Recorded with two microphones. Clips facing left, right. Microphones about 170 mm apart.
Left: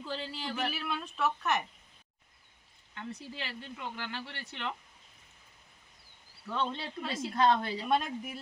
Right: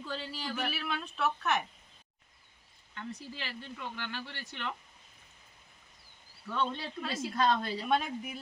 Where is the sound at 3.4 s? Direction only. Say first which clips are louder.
Left 1 dB; 25° left (ahead or behind).